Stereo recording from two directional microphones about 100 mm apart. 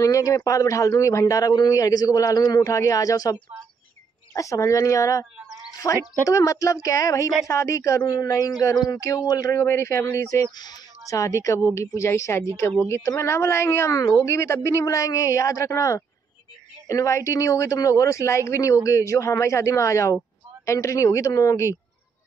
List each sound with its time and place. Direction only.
0.0 s speech: 35° left (ahead or behind)